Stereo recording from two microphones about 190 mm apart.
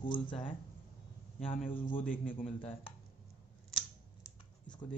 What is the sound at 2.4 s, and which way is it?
Speech, 30° left (ahead or behind).